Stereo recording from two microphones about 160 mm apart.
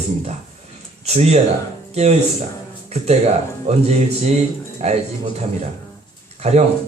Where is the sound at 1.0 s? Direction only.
40° right (ahead or behind).